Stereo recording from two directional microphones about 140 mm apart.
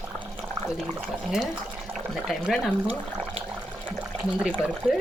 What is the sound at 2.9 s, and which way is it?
Speech, 45° right (ahead or behind).